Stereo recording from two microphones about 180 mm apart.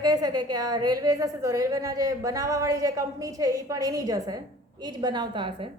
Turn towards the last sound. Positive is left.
turn(degrees=-25)  # may be behind; listen again after turning